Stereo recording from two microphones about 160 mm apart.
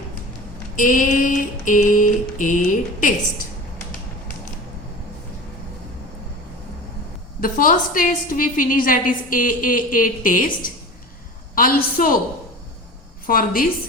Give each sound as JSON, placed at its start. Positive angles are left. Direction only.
{"t": 0.8, "sound": "a woman's voice", "side_deg": 55}
{"t": 7.4, "sound": "a woman's voice", "side_deg": 60}
{"t": 13.2, "sound": "a woman's voice", "side_deg": 65}